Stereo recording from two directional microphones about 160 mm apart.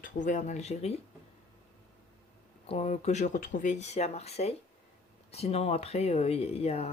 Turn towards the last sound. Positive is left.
turn(degrees=40)  # may be behind; listen again after turning